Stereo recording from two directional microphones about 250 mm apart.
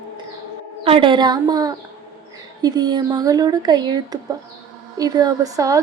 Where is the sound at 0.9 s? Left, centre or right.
Right.